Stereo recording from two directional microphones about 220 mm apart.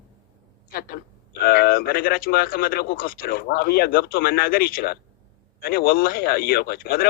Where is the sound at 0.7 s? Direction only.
45° left (ahead or behind).